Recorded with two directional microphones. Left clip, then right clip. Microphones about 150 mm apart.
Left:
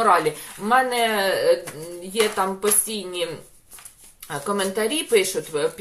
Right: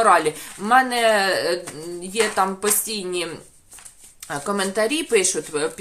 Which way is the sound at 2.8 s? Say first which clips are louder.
Right 1 dB; 40° right (ahead or behind).